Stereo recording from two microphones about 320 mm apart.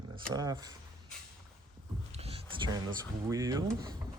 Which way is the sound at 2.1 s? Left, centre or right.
Centre.